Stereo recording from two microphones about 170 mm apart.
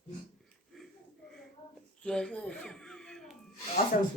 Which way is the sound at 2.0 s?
5° left (ahead or behind).